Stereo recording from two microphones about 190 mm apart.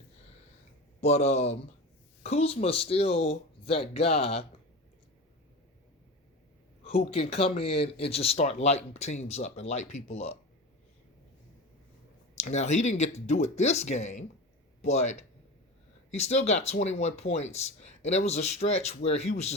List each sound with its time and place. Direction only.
1.0 s speech: 35° left (ahead or behind)
6.8 s speech: 30° left (ahead or behind)
12.4 s speech: 35° left (ahead or behind)